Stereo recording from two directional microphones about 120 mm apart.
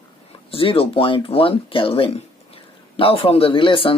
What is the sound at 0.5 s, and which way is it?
Speech, 50° left (ahead or behind).